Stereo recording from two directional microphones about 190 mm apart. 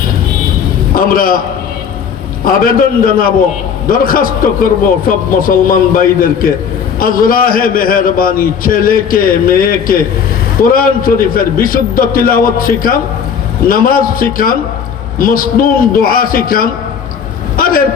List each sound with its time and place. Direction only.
0.9 s a man's voice: 50° left (ahead or behind)
2.4 s a man's voice: 50° left (ahead or behind)
17.6 s a sound: 50° left (ahead or behind)